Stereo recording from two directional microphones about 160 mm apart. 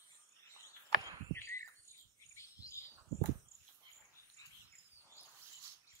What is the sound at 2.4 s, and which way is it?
Chirp, 20° left (ahead or behind).